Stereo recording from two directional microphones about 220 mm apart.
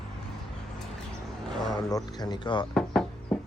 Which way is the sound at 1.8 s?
15° left (ahead or behind).